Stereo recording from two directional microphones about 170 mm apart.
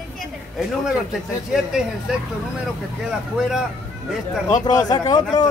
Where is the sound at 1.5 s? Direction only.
5° right (ahead or behind).